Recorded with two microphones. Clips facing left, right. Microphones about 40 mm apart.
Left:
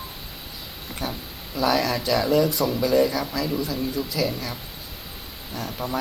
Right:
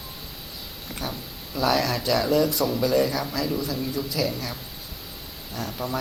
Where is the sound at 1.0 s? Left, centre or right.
Centre.